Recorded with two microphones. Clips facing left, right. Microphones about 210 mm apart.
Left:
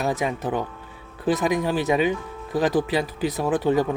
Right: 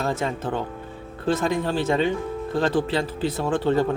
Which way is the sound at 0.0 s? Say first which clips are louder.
Left 1 dB; 15° left (ahead or behind).